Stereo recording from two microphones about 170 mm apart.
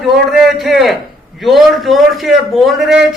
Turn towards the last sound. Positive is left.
turn(degrees=-5)  # may be behind; listen again after turning